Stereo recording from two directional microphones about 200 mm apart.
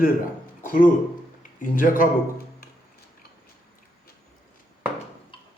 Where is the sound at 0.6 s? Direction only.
40° left (ahead or behind).